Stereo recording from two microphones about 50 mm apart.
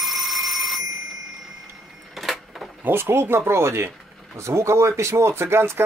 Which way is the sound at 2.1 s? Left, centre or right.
Centre.